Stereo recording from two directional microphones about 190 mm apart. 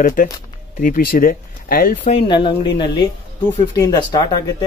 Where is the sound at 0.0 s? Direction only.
45° left (ahead or behind).